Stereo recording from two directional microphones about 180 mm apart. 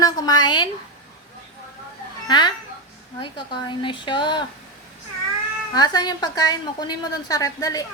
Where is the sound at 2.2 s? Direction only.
25° left (ahead or behind).